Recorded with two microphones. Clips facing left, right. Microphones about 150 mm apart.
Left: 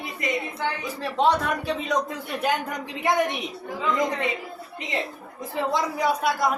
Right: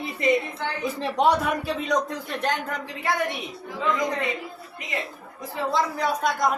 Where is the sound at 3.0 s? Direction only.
20° left (ahead or behind).